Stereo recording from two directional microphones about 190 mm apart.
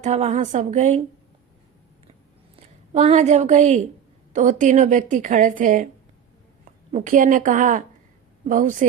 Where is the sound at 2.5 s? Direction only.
35° right (ahead or behind).